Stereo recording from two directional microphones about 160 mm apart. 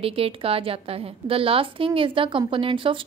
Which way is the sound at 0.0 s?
35° right (ahead or behind).